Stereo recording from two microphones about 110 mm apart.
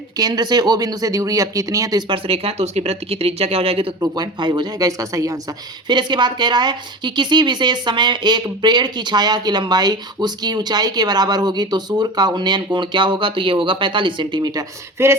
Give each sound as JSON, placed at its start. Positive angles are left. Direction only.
{"t": 0.2, "sound": "speech", "side_deg": -35}
{"t": 2.0, "sound": "speech", "side_deg": -55}
{"t": 4.0, "sound": "speech", "side_deg": -40}
{"t": 14.9, "sound": "speech", "side_deg": -25}